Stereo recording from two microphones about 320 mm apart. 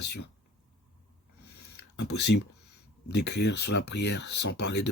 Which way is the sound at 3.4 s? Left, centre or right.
Left.